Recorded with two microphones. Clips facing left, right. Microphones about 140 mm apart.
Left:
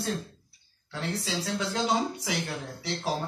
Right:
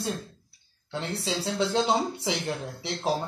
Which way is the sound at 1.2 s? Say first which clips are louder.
Right 7 dB; 30° right (ahead or behind).